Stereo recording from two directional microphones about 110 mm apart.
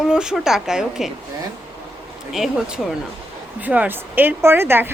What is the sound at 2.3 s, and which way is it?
Speech, centre (ahead or behind).